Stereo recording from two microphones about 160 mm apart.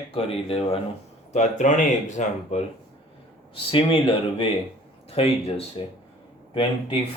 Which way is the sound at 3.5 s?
35° left (ahead or behind).